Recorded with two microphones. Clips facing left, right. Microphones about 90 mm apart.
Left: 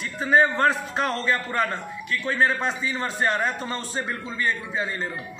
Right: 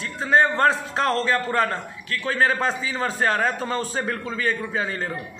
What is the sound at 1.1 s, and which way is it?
Speech, 40° right (ahead or behind).